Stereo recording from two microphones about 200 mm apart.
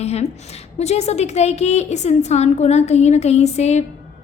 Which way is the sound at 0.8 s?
35° left (ahead or behind).